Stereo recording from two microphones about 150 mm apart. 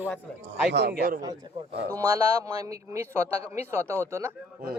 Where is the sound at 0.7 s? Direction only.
90° right.